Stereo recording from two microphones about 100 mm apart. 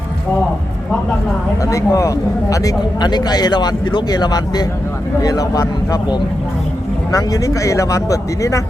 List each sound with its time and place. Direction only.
1.6 s speech: 35° left (ahead or behind)